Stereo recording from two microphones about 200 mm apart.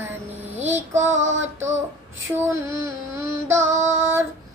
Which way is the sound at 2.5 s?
15° right (ahead or behind).